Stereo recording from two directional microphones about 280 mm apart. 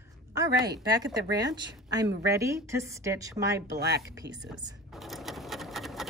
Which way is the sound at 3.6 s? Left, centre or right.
Right.